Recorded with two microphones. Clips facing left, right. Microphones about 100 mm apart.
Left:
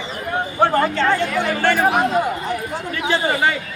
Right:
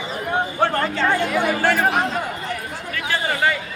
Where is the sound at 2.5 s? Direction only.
20° left (ahead or behind).